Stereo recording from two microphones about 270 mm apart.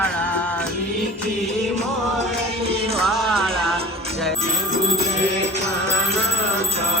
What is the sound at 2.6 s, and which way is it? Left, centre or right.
Music, right.